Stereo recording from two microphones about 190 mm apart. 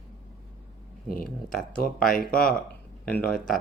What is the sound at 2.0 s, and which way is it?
Speech, 50° left (ahead or behind).